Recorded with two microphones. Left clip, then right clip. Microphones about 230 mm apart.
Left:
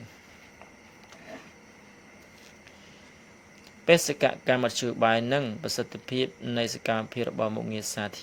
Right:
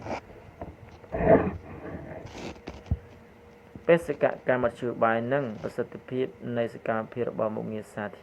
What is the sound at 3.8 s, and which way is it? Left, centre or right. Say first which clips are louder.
Speech: left 1 dB; left.